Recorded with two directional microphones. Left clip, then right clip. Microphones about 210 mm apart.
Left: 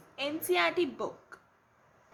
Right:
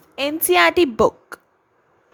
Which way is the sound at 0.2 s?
45° right (ahead or behind).